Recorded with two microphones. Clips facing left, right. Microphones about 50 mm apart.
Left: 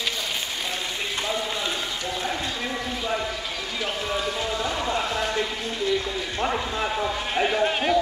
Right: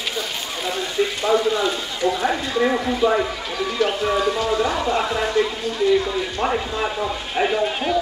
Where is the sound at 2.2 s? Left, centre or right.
Right.